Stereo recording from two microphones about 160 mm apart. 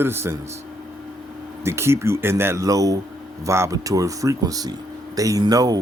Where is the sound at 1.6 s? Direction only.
15° right (ahead or behind).